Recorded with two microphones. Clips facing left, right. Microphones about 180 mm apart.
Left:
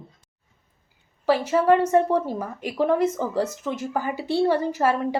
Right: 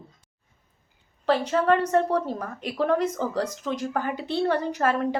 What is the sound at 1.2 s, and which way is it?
A woman's voice, 10° left (ahead or behind).